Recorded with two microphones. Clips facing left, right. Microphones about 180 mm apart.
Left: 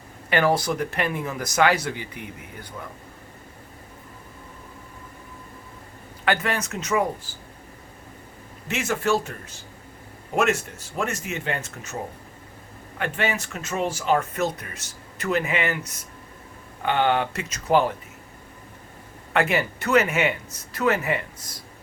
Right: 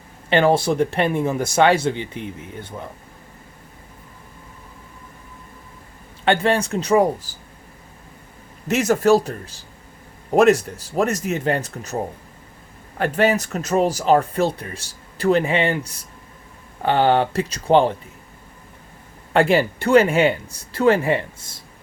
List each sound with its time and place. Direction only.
0.3 s speech: 25° right (ahead or behind)
6.2 s speech: 30° right (ahead or behind)
8.6 s speech: 40° right (ahead or behind)
13.0 s speech: 40° right (ahead or behind)
19.3 s speech: 30° right (ahead or behind)